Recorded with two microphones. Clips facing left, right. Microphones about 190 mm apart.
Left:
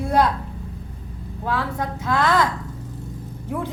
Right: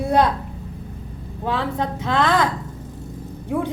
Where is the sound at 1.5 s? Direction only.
20° right (ahead or behind).